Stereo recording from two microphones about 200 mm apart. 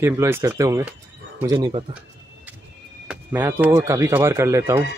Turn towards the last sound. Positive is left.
turn(degrees=-15)  # may be behind; listen again after turning